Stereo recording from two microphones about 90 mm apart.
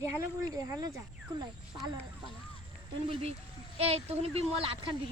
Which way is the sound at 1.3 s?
55° right (ahead or behind).